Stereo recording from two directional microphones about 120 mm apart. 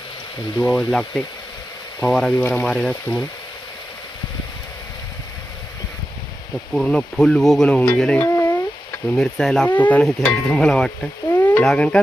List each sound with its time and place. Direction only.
0.6 s speech: 10° left (ahead or behind)
6.7 s speech: 5° left (ahead or behind)
8.3 s a sound: 25° left (ahead or behind)
9.1 s speech: 5° left (ahead or behind)
11.3 s a sound: 15° left (ahead or behind)
11.6 s speech: 5° left (ahead or behind)